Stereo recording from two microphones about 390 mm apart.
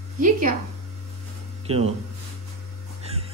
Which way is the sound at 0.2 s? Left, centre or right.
Right.